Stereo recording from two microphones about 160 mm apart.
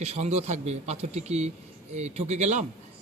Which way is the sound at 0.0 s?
45° right (ahead or behind).